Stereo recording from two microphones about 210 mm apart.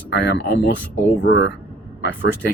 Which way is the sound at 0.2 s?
50° left (ahead or behind).